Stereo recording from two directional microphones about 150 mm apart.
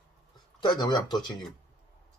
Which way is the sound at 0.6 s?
30° left (ahead or behind).